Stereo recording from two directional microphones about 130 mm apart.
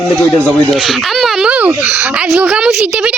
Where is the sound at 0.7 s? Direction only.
Centre (ahead or behind).